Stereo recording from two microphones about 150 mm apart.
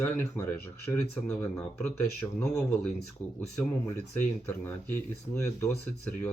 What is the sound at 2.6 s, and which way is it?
Speech, 5° left (ahead or behind).